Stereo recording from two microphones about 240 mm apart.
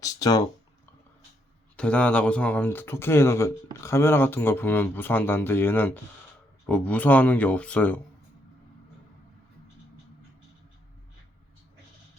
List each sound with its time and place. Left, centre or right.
0.0 s speech: centre
1.7 s speech: centre